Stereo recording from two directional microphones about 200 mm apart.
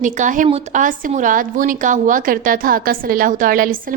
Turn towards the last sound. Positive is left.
turn(degrees=-45)  # may be behind; listen again after turning